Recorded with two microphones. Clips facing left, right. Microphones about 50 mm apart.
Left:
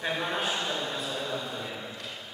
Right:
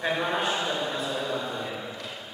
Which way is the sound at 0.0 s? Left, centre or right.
Centre.